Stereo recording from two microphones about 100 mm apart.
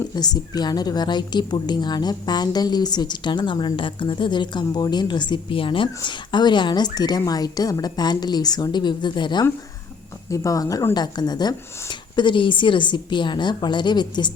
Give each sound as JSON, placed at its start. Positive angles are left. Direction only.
{"t": 0.2, "sound": "a woman's voice", "side_deg": 40}
{"t": 10.3, "sound": "a woman's voice", "side_deg": 35}